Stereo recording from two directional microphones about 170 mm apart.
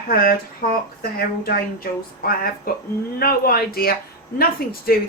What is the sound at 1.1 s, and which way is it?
A woman's voice, 60° left (ahead or behind).